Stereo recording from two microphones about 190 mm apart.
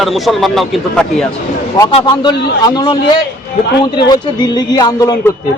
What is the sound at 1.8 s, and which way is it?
A man's voice, 15° left (ahead or behind).